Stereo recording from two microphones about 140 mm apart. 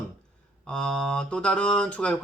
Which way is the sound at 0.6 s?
5° left (ahead or behind).